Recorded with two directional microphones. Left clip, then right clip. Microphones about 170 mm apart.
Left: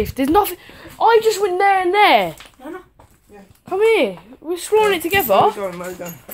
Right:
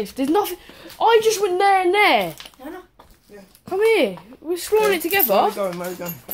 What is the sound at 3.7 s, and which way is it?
Speech, 15° left (ahead or behind).